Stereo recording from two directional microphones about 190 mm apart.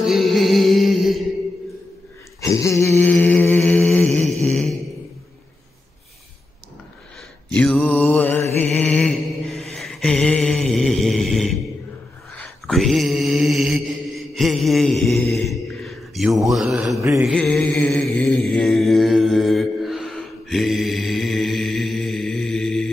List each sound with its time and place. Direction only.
0.0 s music: centre (ahead or behind)
2.4 s mantra: 15° left (ahead or behind)
7.4 s mantra: 5° left (ahead or behind)